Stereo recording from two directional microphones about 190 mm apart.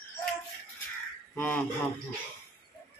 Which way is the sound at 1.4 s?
10° left (ahead or behind).